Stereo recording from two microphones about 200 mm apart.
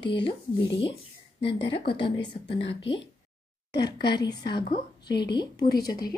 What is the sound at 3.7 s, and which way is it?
Speech, 55° left (ahead or behind).